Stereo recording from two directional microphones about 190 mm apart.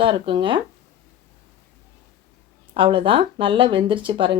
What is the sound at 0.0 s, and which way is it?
Speech, 25° right (ahead or behind).